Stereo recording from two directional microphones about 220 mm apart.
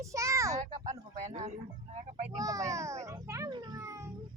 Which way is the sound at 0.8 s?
35° right (ahead or behind).